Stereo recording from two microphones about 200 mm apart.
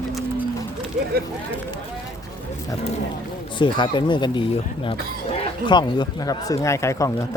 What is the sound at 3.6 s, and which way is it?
Speech, 25° left (ahead or behind).